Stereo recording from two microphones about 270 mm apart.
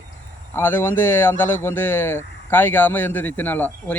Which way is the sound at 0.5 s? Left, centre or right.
Centre.